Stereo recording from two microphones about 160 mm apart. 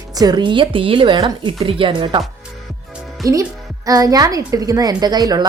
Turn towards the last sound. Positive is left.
turn(degrees=-25)  # may be behind; listen again after turning